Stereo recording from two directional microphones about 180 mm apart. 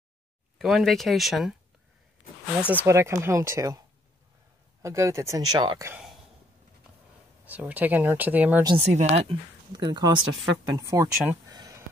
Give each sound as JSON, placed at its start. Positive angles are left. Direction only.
{"t": 0.6, "sound": "speech", "side_deg": 0}
{"t": 2.7, "sound": "speech", "side_deg": -10}
{"t": 4.8, "sound": "speech", "side_deg": -15}
{"t": 5.9, "sound": "speech", "side_deg": -5}
{"t": 7.4, "sound": "speech", "side_deg": -10}
{"t": 8.7, "sound": "speech", "side_deg": -35}
{"t": 9.7, "sound": "speech", "side_deg": -25}